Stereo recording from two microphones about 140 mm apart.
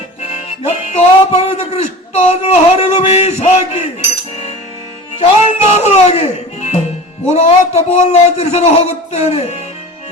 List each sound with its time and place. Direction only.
0.2 s music: 50° left (ahead or behind)
5.2 s music: 50° left (ahead or behind)
7.3 s a man's voice: 50° left (ahead or behind)